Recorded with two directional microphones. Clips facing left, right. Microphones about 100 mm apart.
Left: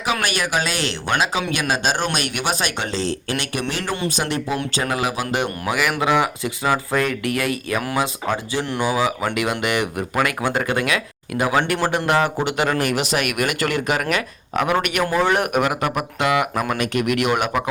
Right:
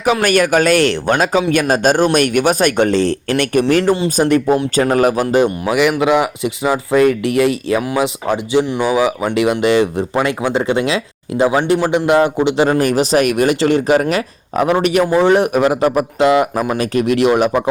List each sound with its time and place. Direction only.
0.0 s speech: 45° right (ahead or behind)
5.6 s speech: 20° right (ahead or behind)
12.8 s speech: 35° right (ahead or behind)